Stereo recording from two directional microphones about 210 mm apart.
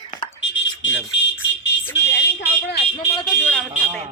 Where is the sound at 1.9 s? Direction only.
55° left (ahead or behind).